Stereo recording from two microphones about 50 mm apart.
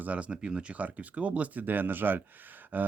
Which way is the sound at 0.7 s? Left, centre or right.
Right.